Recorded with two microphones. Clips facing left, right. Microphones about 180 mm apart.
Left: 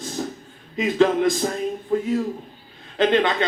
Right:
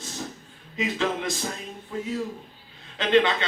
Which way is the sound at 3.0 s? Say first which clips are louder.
Left 2 dB; 45° left (ahead or behind).